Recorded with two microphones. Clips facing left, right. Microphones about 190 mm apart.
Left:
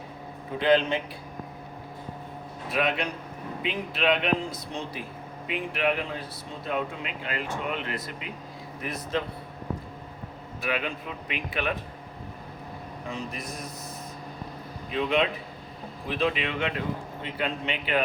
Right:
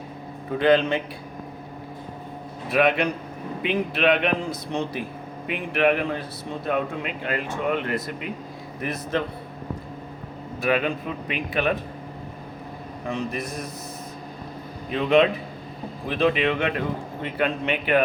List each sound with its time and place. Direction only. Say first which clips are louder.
0.6 s speech: right 3 dB; 55° right (ahead or behind)
2.6 s speech: right 7 dB; 65° right (ahead or behind)
4.7 s speech: right 7 dB; 80° right
5.5 s speech: right 6 dB; 60° right (ahead or behind)
10.6 s speech: right 7 dB; 45° right (ahead or behind)
13.1 s speech: right 7 dB; 60° right (ahead or behind)
14.8 s a man's voice: right 7 dB; 50° right (ahead or behind)